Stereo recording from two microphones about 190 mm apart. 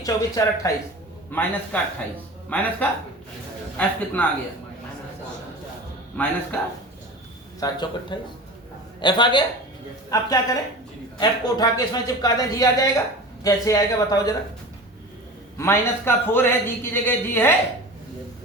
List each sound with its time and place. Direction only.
0.0 s a man's voice: 15° left (ahead or behind)
3.8 s a man's voice: 10° left (ahead or behind)
6.2 s a man's voice: 5° left (ahead or behind)
7.6 s a man's voice: 25° left (ahead or behind)
15.5 s a man's voice: 15° left (ahead or behind)